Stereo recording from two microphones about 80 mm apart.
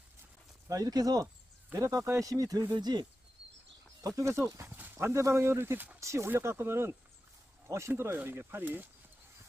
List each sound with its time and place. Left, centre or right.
0.7 s speech: right
2.7 s speech: right
4.2 s speech: right